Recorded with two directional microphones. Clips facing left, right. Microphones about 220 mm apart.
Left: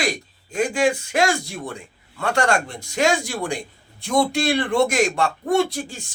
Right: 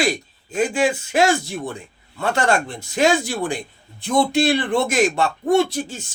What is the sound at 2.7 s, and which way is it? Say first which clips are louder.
A man's voice: right 2 dB; 5° right (ahead or behind).